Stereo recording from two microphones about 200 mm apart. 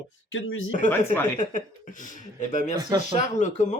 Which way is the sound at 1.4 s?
40° left (ahead or behind).